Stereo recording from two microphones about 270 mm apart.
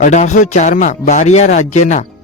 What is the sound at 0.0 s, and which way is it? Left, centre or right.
Speech, left.